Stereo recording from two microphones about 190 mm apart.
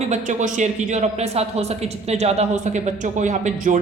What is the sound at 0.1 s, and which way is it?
A woman's voice, 40° right (ahead or behind).